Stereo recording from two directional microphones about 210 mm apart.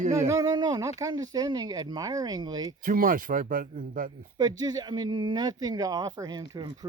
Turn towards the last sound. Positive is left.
turn(degrees=-20)  # may be behind; listen again after turning